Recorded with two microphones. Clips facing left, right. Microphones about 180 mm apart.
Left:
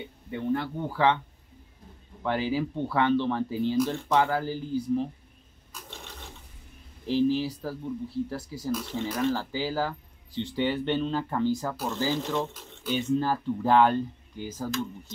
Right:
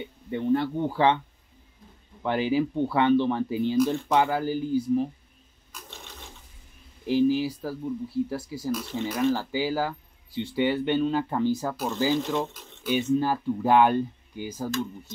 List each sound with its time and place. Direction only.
0.3 s speech: 20° right (ahead or behind)
2.2 s speech: 20° right (ahead or behind)
7.1 s speech: 10° right (ahead or behind)